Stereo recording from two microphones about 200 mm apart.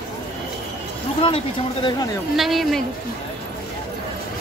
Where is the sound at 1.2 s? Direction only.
25° left (ahead or behind).